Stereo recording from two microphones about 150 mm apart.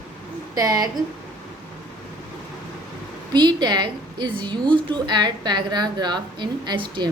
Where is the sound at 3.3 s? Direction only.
30° right (ahead or behind).